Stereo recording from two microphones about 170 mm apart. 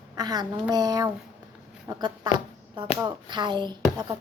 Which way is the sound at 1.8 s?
25° right (ahead or behind).